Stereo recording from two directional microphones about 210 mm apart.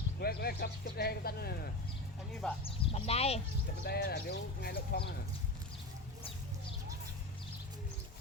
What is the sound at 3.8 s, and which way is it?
Speech, 50° left (ahead or behind).